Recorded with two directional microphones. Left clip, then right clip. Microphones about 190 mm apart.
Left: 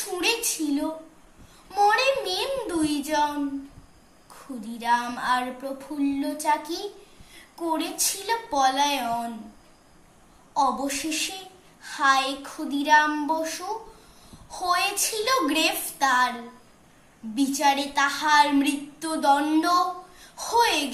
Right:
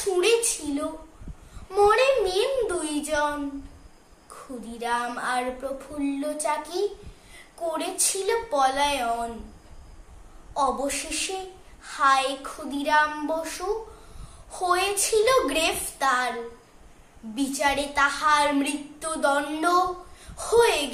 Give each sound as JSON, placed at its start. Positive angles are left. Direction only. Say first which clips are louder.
{"t": 0.2, "sound": "a woman's voice", "louder": "right 2 dB", "side_deg": -15}
{"t": 1.7, "sound": "a sound", "louder": "right 1 dB", "side_deg": -15}
{"t": 4.6, "sound": "a woman's voice", "louder": "left 3 dB", "side_deg": -10}
{"t": 10.5, "sound": "a woman's voice", "louder": "left 1 dB", "side_deg": -15}
{"t": 17.4, "sound": "a woman's voice", "louder": "left 2 dB", "side_deg": -15}